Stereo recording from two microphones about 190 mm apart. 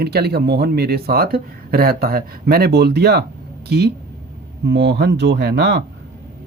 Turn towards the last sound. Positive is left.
turn(degrees=-60)  # may be behind; listen again after turning